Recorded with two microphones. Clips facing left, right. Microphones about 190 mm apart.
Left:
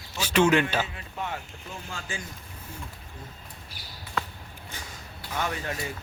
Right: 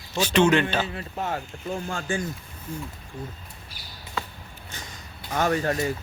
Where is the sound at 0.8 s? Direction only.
40° right (ahead or behind).